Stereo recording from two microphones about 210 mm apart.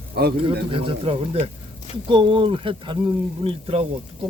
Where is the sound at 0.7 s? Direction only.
25° right (ahead or behind).